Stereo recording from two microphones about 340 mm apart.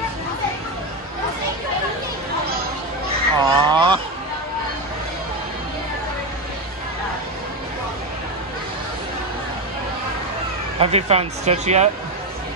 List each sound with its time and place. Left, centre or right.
3.3 s fowl: centre
10.8 s speech: centre